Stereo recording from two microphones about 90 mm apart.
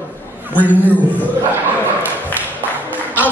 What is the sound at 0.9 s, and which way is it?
Speech, 20° left (ahead or behind).